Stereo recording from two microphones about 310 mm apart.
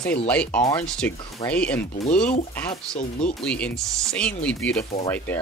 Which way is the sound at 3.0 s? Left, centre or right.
Left.